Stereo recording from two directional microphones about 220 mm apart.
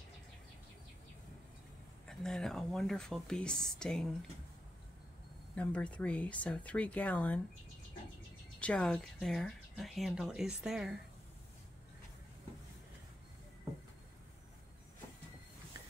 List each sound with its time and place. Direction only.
2.0 s speech: centre (ahead or behind)
5.6 s speech: 5° left (ahead or behind)
8.5 s speech: 5° left (ahead or behind)